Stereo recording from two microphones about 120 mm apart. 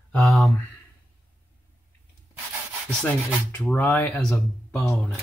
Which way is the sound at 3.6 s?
15° left (ahead or behind).